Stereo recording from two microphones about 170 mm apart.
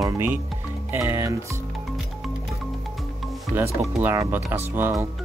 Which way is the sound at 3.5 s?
10° right (ahead or behind).